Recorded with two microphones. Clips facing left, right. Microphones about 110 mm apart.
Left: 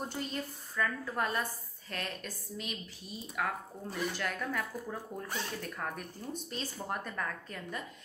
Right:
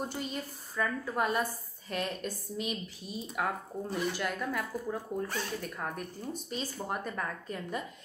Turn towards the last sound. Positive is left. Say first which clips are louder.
# right 4 dB
turn(degrees=-15)  # may be behind; listen again after turning